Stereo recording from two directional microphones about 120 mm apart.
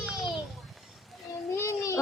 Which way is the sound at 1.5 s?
25° left (ahead or behind).